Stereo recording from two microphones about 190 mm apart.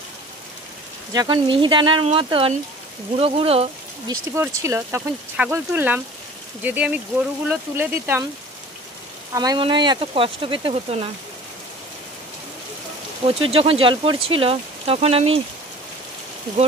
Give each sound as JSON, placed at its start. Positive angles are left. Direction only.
{"t": 1.1, "sound": "speech", "side_deg": -25}
{"t": 4.1, "sound": "speech", "side_deg": -15}
{"t": 9.3, "sound": "speech", "side_deg": -20}
{"t": 13.3, "sound": "speech", "side_deg": -30}